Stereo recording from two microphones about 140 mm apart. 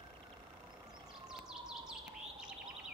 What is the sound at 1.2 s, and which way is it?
Siren, 5° right (ahead or behind).